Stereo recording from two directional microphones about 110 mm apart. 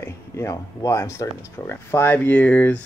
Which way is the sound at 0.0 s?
25° left (ahead or behind).